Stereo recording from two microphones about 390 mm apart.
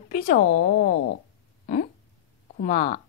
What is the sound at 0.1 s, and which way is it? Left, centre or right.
Speech, left.